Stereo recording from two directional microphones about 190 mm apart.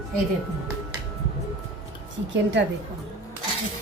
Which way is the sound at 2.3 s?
70° right (ahead or behind).